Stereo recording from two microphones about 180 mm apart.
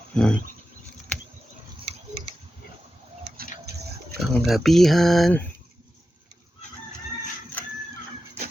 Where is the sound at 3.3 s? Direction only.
60° right (ahead or behind).